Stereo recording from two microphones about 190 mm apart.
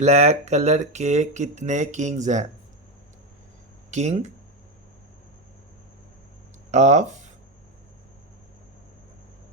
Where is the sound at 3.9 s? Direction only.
35° right (ahead or behind).